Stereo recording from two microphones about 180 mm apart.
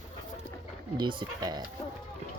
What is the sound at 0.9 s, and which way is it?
Speech, 25° right (ahead or behind).